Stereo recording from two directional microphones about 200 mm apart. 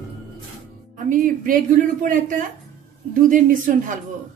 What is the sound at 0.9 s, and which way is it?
Speech, 45° right (ahead or behind).